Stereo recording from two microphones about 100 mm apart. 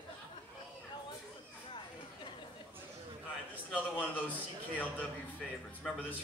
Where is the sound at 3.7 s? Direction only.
15° left (ahead or behind).